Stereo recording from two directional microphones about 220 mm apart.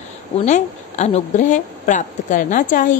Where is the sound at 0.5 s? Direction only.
30° left (ahead or behind).